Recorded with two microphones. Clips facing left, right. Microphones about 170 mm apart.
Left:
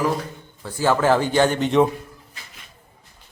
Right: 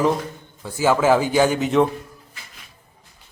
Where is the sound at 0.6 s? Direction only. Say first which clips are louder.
Right 1 dB; 10° right (ahead or behind).